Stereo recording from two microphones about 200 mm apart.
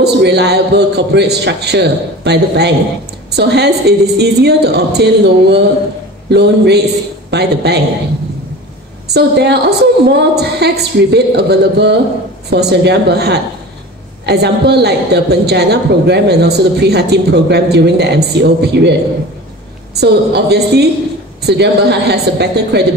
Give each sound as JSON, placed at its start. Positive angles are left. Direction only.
{"t": 0.0, "sound": "a woman's voice", "side_deg": -55}
{"t": 9.1, "sound": "a woman's voice", "side_deg": -55}
{"t": 20.0, "sound": "a woman's voice", "side_deg": -55}